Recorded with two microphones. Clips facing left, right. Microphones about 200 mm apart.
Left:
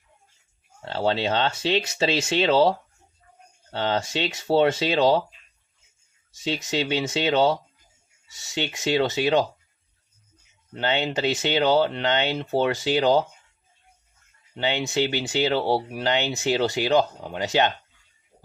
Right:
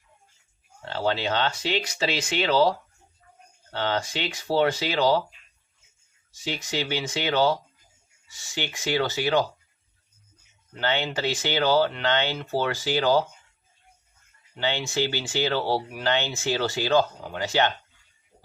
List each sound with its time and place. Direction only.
0.9 s speech: 25° left (ahead or behind)
6.4 s speech: 25° left (ahead or behind)
10.8 s speech: 20° left (ahead or behind)
14.5 s speech: 20° left (ahead or behind)